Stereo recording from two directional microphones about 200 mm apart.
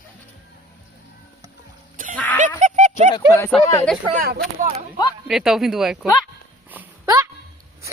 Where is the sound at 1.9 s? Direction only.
40° right (ahead or behind).